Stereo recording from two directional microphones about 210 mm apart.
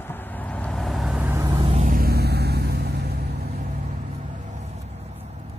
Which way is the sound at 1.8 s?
45° right (ahead or behind).